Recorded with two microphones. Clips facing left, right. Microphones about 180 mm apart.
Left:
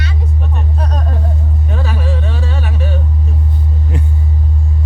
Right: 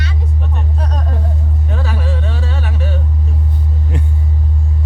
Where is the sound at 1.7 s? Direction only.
15° left (ahead or behind).